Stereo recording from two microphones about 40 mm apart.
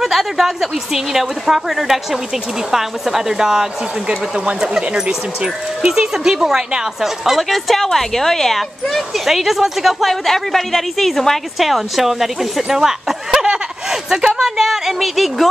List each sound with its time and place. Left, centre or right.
0.0 s speech: centre; by 5.9 s right
5.9 s a woman's voice: centre
9.2 s speech: centre
10.2 s a woman's voice: centre
12.6 s a sound: centre
14.1 s a woman's voice: centre